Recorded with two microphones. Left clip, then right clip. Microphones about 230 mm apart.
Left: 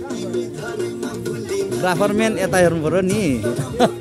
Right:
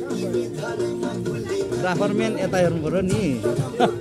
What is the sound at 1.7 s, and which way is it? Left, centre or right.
Speech, left.